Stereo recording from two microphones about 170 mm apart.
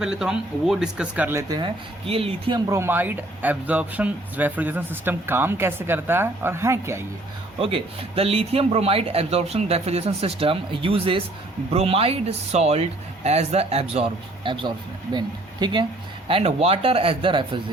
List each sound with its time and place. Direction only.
0.0 s speech: 5° right (ahead or behind); by 1.7 s 25° right (ahead or behind)
2.0 s speech: 35° right (ahead or behind)
2.6 s speech: 15° right (ahead or behind)
7.6 s speech: 35° right (ahead or behind)